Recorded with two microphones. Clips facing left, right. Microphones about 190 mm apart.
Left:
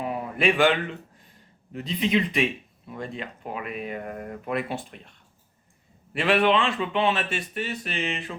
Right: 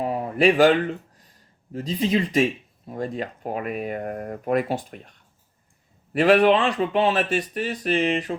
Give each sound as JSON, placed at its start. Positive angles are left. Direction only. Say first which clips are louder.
{"t": 0.0, "sound": "a sound", "louder": "right 5 dB", "side_deg": -35}
{"t": 1.7, "sound": "speech", "louder": "right 2 dB", "side_deg": -40}
{"t": 6.1, "sound": "speech", "louder": "right 5 dB", "side_deg": -40}